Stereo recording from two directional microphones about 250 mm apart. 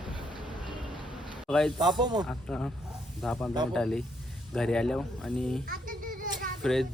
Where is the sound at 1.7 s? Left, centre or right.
Centre.